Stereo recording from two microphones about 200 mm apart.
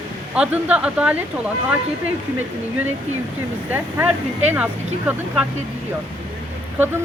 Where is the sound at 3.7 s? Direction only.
10° right (ahead or behind).